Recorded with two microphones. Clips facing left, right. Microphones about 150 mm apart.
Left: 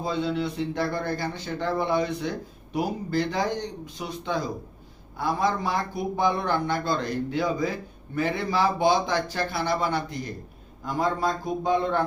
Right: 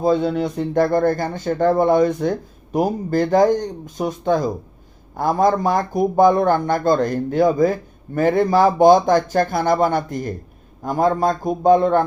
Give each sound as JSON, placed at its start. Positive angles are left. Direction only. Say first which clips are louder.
{"t": 0.0, "sound": "speech", "louder": "right 9 dB", "side_deg": -50}